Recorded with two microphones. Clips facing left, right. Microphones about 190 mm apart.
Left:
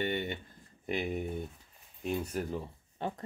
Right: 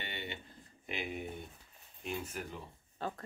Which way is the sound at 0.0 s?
45° left (ahead or behind).